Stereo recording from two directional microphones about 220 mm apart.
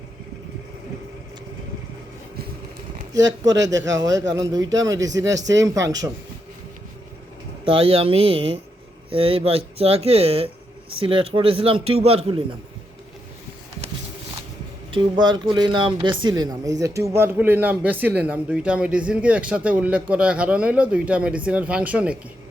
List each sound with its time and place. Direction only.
3.2 s speech: 55° right (ahead or behind)
3.9 s speech: 15° right (ahead or behind)
7.6 s speech: 25° right (ahead or behind)
14.9 s speech: 20° right (ahead or behind); by 22.2 s 5° right (ahead or behind)